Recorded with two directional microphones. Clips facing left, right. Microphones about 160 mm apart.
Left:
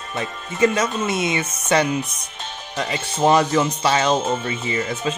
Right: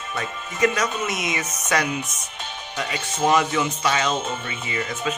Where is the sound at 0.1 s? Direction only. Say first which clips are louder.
Left 3 dB; 25° left (ahead or behind).